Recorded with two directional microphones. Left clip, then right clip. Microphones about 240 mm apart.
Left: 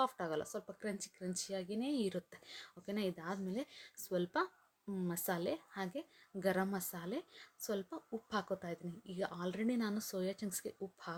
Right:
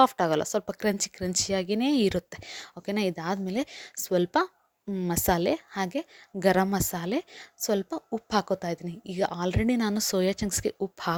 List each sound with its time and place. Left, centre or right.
0.0 s a woman's voice: right